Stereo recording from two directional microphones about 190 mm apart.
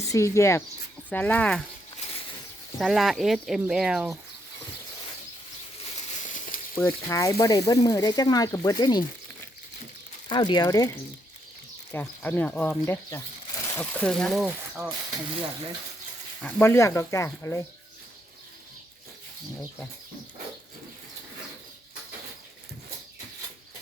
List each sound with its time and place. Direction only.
0.0 s speech: 15° left (ahead or behind)
2.7 s speech: centre (ahead or behind)
6.2 s frying: 45° left (ahead or behind)
6.7 s speech: 15° left (ahead or behind)
10.2 s speech: 25° left (ahead or behind); by 14.8 s 5° right (ahead or behind)
16.4 s speech: 10° left (ahead or behind)